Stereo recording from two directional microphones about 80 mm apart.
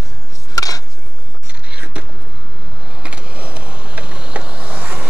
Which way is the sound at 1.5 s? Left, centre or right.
Centre.